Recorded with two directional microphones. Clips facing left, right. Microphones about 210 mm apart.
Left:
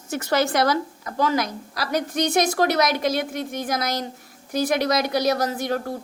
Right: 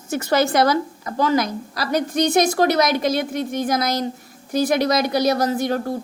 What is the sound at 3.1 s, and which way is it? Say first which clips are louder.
Speech: right 3 dB; 35° right (ahead or behind).